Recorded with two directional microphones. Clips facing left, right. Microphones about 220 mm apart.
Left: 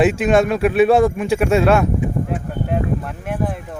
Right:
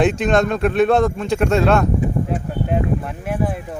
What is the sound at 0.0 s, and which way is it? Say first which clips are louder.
Speech: left 2 dB; 5° left (ahead or behind).